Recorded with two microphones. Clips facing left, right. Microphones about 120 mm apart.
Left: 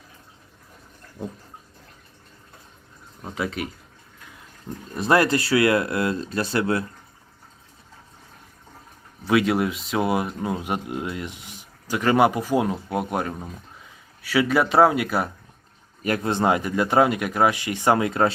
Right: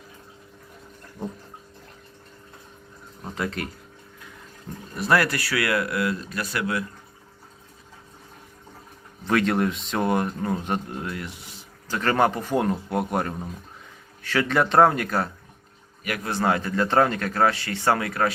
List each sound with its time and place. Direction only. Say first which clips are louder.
3.3 s speech: left 1 dB; 5° left (ahead or behind)
4.9 s speech: left 3 dB; 20° left (ahead or behind)
9.2 s speech: left 2 dB; 5° left (ahead or behind)
16.0 s speech: left 3 dB; 25° left (ahead or behind)